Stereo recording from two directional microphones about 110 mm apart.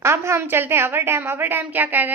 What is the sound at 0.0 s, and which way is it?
A woman's voice, 25° right (ahead or behind).